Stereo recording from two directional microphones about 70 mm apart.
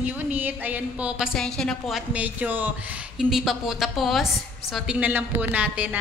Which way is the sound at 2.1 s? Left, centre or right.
Right.